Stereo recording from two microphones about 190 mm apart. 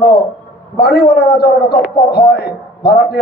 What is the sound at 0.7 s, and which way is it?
A man's voice, 60° left (ahead or behind).